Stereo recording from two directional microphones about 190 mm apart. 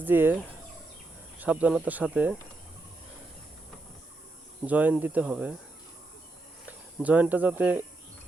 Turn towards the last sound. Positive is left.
turn(degrees=-10)  # may be behind; listen again after turning